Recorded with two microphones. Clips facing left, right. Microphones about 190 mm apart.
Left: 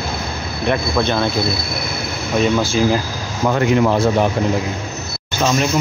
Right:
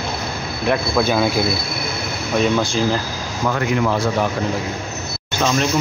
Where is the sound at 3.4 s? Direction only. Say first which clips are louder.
Left 4 dB; 25° left (ahead or behind).